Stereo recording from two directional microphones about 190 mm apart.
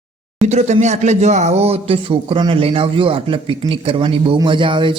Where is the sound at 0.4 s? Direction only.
35° right (ahead or behind).